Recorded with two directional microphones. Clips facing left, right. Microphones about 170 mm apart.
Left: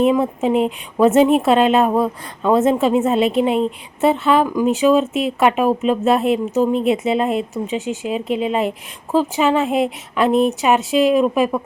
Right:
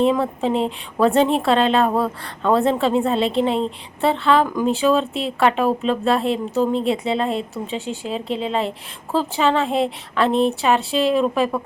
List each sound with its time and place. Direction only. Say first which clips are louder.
0.1 s a woman's voice: left 3 dB; 10° left (ahead or behind)
4.8 s a woman's voice: left 5 dB; 15° left (ahead or behind)